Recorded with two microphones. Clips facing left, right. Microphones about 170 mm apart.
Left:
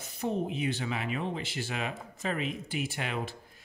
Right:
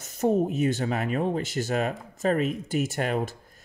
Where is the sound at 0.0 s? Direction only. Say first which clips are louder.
Right 8 dB; 45° right (ahead or behind).